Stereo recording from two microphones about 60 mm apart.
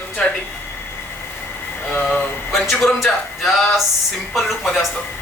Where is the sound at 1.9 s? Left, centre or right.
Centre.